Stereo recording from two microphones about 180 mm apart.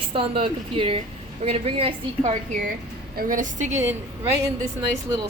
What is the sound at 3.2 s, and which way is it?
Speech, 50° right (ahead or behind).